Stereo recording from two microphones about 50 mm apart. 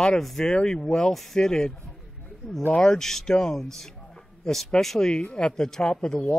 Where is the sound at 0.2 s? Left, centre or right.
Centre.